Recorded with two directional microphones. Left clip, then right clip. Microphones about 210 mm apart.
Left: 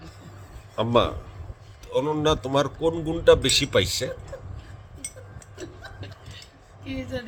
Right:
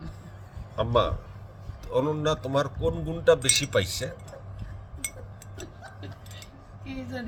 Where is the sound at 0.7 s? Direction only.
20° left (ahead or behind).